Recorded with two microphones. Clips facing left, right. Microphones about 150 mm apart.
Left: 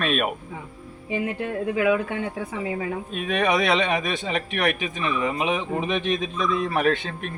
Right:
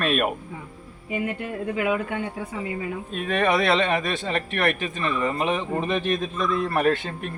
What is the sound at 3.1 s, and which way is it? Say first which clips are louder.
Speech: right 1 dB; 10° left (ahead or behind).